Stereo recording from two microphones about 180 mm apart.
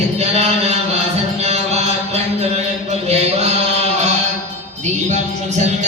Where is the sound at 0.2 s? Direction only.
35° right (ahead or behind).